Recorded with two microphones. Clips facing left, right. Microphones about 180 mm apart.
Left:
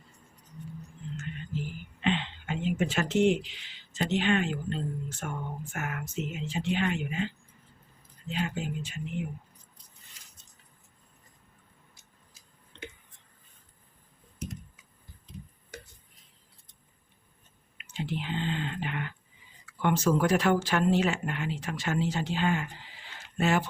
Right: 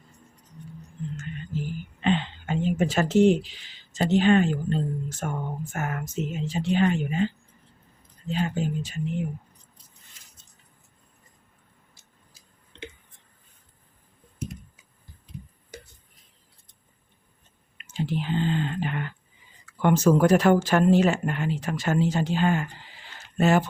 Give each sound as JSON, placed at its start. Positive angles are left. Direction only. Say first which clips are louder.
{"t": 1.5, "sound": "speech", "louder": "right 6 dB", "side_deg": -40}
{"t": 8.3, "sound": "speech", "louder": "right 5 dB", "side_deg": -35}
{"t": 17.7, "sound": "speech", "louder": "right 6 dB", "side_deg": -45}
{"t": 23.0, "sound": "a sound", "louder": "right 6 dB", "side_deg": -45}